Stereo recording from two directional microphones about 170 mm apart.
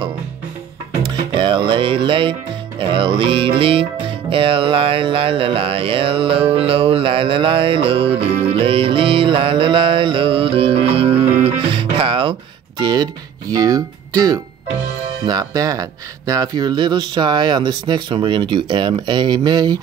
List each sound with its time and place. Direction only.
1.3 s music: 30° right (ahead or behind)
15.2 s speech: 25° right (ahead or behind)